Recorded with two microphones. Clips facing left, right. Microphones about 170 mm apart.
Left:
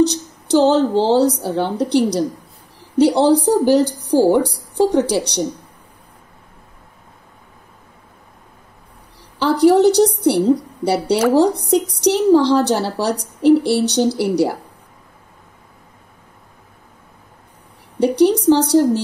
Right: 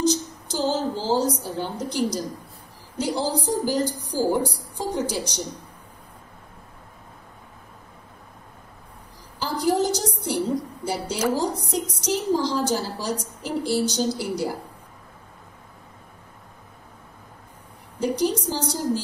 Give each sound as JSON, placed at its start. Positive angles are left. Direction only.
{"t": 0.0, "sound": "a woman's voice", "side_deg": 70}
{"t": 9.4, "sound": "a woman's voice", "side_deg": 70}
{"t": 17.9, "sound": "a woman's voice", "side_deg": 70}